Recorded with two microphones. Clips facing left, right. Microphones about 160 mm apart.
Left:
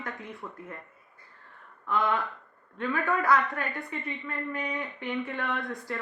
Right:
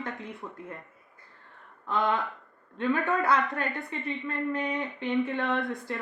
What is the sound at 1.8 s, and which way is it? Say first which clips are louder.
Speech: even; 25° right (ahead or behind).